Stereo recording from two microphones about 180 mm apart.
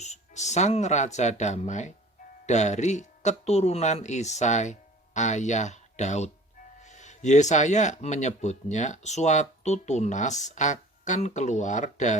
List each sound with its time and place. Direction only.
0.0 s speech: 40° left (ahead or behind)